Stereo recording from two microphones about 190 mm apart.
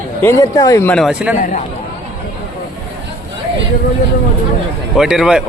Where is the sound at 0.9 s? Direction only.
5° right (ahead or behind).